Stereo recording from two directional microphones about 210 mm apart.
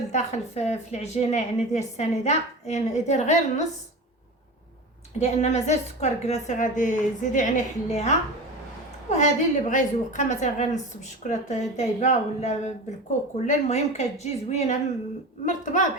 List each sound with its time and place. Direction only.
0.1 s a woman's voice: 30° left (ahead or behind)
5.2 s a woman's voice: 30° left (ahead or behind)